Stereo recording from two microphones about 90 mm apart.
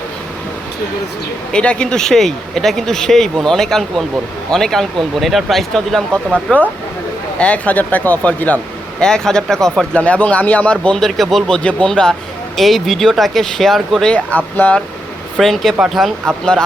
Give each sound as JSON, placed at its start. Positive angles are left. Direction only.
{"t": 1.5, "sound": "speech", "side_deg": 10}
{"t": 7.3, "sound": "speech", "side_deg": 15}
{"t": 14.1, "sound": "speech", "side_deg": 15}
{"t": 15.4, "sound": "speech", "side_deg": 5}